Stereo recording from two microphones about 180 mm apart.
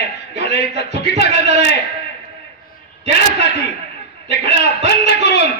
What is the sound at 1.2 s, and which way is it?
Speech, 40° right (ahead or behind).